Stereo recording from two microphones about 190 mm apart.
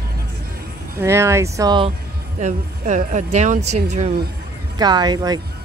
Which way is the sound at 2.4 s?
40° right (ahead or behind).